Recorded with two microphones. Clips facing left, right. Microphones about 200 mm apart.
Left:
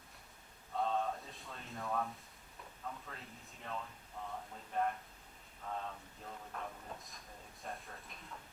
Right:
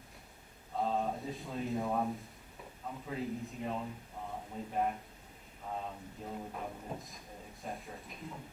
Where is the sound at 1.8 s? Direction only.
20° right (ahead or behind).